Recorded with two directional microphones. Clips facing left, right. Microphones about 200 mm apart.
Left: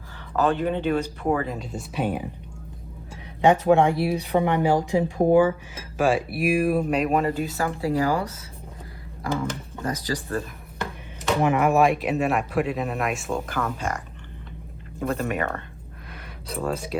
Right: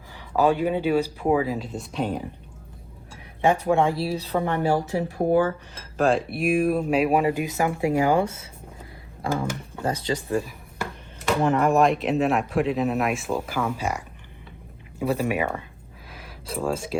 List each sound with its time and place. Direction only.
0.3 s speech: 10° right (ahead or behind); by 2.2 s 5° left (ahead or behind)
3.4 s speech: 20° left (ahead or behind); by 8.4 s 25° right (ahead or behind)
9.8 s speech: 30° right (ahead or behind)
11.4 s speech: 10° left (ahead or behind); by 15.6 s 10° right (ahead or behind)
16.0 s a sound: centre (ahead or behind)